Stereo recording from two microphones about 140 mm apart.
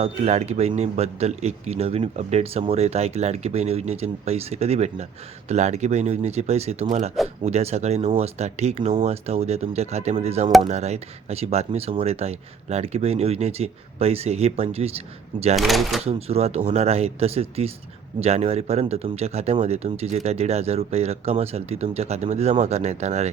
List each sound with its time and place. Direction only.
0.0 s a man's voice: 50° right (ahead or behind)
15.5 s speech: centre (ahead or behind)
16.0 s a man's voice: 45° right (ahead or behind)